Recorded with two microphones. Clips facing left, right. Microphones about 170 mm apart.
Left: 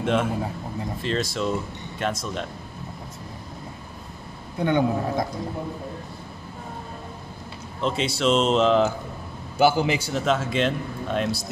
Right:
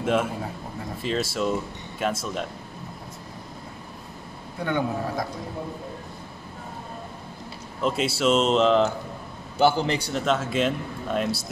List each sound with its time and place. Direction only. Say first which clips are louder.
0.0 s a man's voice: left 1 dB; 5° right (ahead or behind)
4.6 s a man's voice: left 4 dB; 20° left (ahead or behind)
7.8 s a man's voice: even; 5° right (ahead or behind)